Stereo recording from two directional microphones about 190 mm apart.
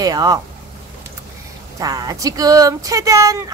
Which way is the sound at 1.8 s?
20° right (ahead or behind).